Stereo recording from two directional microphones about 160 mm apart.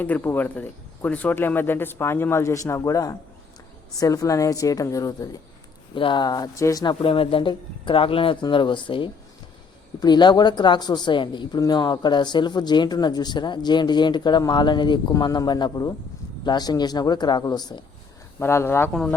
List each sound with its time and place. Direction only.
0.0 s speech: 10° left (ahead or behind)
7.0 s speech: 35° left (ahead or behind)
18.3 s speech: 15° left (ahead or behind)